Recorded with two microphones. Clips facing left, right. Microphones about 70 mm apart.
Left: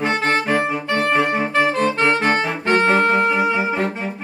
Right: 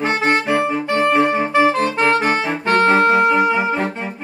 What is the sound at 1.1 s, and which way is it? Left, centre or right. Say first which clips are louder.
Saxophone: right 2 dB; centre.